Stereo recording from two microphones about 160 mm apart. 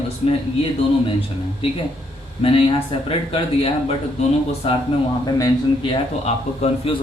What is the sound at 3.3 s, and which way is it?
Speech, 35° left (ahead or behind).